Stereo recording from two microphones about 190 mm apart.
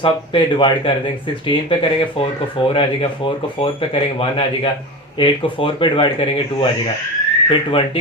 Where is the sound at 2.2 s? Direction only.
30° left (ahead or behind).